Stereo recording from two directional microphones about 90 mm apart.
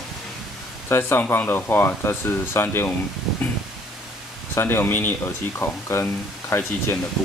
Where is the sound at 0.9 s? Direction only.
25° left (ahead or behind).